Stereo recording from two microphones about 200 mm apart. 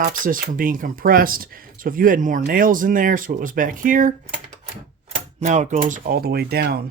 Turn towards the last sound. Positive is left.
turn(degrees=-50)  # may be behind; listen again after turning